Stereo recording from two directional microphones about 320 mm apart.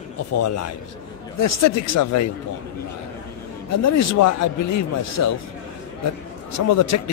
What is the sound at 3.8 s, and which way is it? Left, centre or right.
A man's voice, left.